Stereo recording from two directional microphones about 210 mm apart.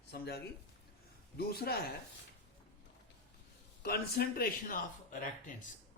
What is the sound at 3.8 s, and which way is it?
Speech, 45° left (ahead or behind).